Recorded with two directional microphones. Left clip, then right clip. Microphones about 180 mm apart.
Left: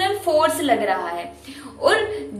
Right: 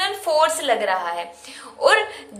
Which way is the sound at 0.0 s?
25° right (ahead or behind).